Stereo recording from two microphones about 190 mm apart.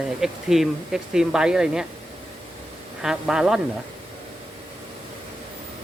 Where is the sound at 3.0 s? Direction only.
5° right (ahead or behind).